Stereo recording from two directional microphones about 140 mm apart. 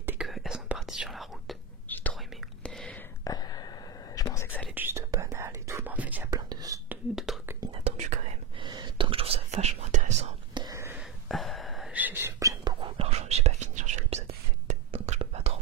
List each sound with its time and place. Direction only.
0.0 s whispering: 5° right (ahead or behind)
3.3 s whispering: 30° left (ahead or behind)
4.7 s whispering: 15° right (ahead or behind)
6.5 s whispering: 25° right (ahead or behind)
6.9 s whispering: 5° right (ahead or behind)
7.8 s whispering: 55° right (ahead or behind)
8.5 s whispering: 35° right (ahead or behind); by 10.3 s 55° right (ahead or behind)
10.5 s whispering: 30° right (ahead or behind)
11.0 s a sound: centre (ahead or behind)
11.9 s whispering: 15° right (ahead or behind)
12.8 s whispering: 45° right (ahead or behind)